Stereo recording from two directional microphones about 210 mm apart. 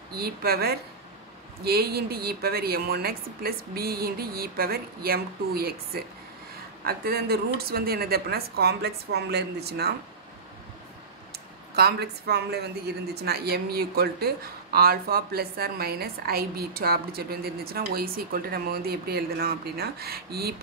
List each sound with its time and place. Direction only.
0.1 s speech: 45° right (ahead or behind)
11.7 s speech: 50° right (ahead or behind)